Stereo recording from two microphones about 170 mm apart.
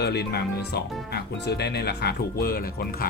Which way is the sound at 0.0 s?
70° left (ahead or behind).